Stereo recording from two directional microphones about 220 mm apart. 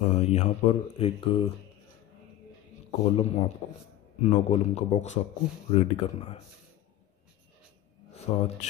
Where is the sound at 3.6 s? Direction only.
30° left (ahead or behind).